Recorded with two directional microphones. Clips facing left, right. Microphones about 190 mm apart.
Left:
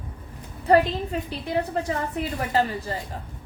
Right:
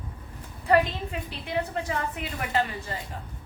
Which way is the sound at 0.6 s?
35° left (ahead or behind).